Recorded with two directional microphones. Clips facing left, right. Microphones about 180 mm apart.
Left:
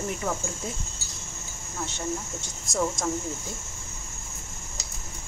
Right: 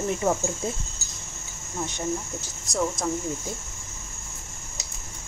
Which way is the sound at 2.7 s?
Centre (ahead or behind).